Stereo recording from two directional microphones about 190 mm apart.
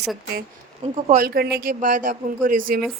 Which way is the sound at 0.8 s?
40° right (ahead or behind).